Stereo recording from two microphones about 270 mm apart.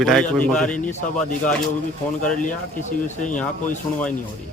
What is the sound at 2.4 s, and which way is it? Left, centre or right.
Speech, left.